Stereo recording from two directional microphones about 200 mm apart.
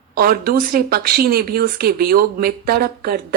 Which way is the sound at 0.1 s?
50° right (ahead or behind).